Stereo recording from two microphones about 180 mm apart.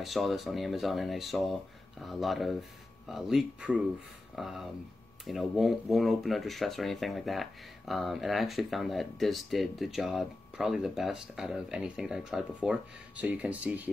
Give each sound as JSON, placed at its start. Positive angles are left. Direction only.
{"t": 0.0, "sound": "speech", "side_deg": 0}